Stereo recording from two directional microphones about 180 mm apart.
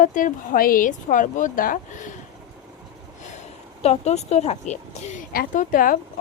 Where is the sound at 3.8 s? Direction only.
35° left (ahead or behind).